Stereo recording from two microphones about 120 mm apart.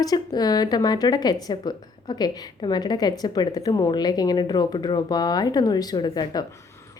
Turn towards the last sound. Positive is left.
turn(degrees=35)  # may be behind; listen again after turning